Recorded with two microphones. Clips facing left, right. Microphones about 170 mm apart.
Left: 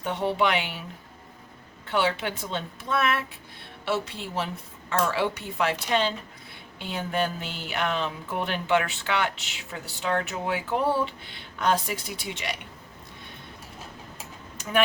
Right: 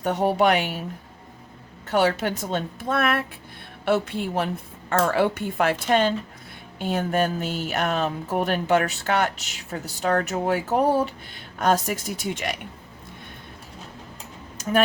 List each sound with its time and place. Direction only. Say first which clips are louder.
0.0 s speech: right 5 dB; 45° right (ahead or behind)
1.9 s speech: right 5 dB; 40° right (ahead or behind)